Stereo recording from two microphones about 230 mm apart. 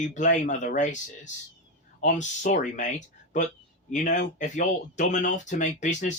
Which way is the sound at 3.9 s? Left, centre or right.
Left.